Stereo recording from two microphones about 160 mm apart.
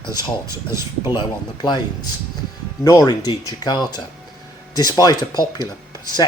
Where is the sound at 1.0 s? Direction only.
30° left (ahead or behind).